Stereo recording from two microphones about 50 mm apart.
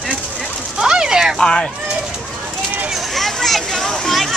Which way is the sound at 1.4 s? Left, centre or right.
Centre.